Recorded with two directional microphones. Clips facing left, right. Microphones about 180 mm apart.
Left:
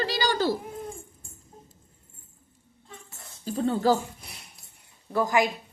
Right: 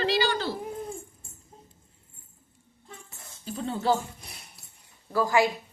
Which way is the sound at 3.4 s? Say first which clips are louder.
Left 4 dB; 40° left (ahead or behind).